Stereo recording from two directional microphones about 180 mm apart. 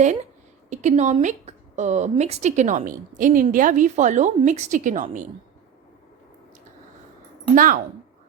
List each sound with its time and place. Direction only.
0.7 s a woman's voice: 40° right (ahead or behind)
7.5 s a woman's voice: 50° right (ahead or behind)